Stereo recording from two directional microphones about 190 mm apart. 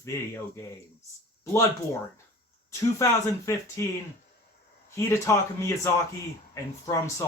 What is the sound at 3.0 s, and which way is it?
Speech, 15° left (ahead or behind).